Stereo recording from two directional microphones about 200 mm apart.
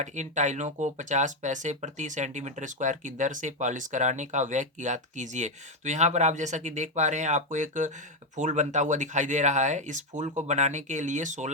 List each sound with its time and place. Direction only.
0.0 s speech: 35° right (ahead or behind)